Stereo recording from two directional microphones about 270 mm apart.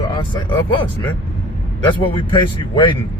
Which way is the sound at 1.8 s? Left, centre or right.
Centre.